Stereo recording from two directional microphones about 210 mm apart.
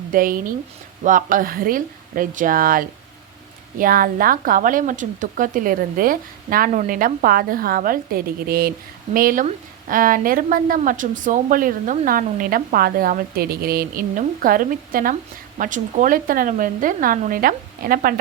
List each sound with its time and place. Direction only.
0.1 s speech: 40° right (ahead or behind)